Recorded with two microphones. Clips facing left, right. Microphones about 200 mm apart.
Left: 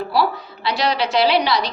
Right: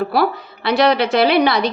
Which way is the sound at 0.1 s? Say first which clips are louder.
Right 2 dB; 55° right (ahead or behind).